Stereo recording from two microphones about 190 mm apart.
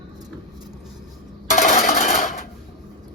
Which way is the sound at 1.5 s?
40° left (ahead or behind).